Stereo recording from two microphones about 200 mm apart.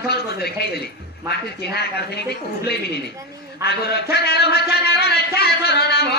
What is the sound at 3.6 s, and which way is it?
A man's voice, 55° left (ahead or behind).